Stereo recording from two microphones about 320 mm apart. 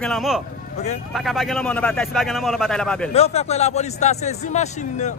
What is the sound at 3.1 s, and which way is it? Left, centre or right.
A man's voice, centre.